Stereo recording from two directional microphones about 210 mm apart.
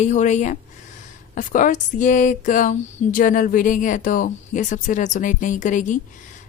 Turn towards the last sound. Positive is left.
turn(degrees=35)  # may be behind; listen again after turning